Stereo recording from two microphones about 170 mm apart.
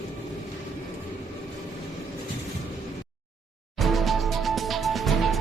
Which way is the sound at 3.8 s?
Centre (ahead or behind).